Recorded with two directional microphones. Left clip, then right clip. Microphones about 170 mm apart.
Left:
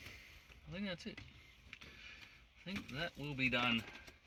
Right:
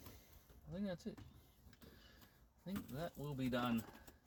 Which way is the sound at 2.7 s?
10° left (ahead or behind).